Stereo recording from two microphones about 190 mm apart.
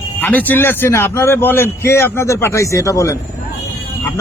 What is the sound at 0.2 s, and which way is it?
A man's voice, 10° left (ahead or behind).